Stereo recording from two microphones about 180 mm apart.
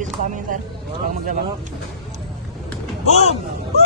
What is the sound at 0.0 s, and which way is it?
Speech, 45° right (ahead or behind).